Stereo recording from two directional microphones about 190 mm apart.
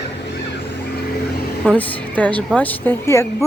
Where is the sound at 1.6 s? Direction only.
5° left (ahead or behind).